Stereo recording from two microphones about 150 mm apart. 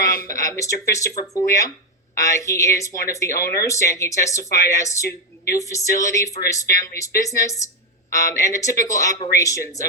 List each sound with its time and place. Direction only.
0.1 s a woman's voice: 20° left (ahead or behind)